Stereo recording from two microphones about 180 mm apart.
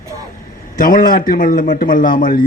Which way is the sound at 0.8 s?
50° left (ahead or behind).